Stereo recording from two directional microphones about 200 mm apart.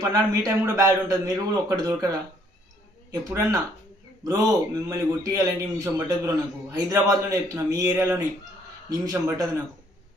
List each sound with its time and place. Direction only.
0.1 s a man's voice: 15° right (ahead or behind)